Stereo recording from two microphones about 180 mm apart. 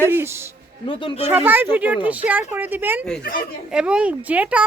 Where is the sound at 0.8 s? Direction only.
30° left (ahead or behind).